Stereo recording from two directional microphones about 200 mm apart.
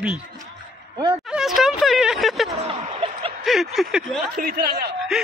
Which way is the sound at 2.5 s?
35° right (ahead or behind).